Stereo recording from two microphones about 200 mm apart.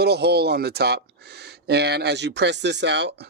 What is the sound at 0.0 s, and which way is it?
Speech, 55° right (ahead or behind).